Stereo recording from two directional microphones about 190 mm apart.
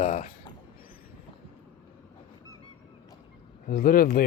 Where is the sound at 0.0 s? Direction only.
40° left (ahead or behind).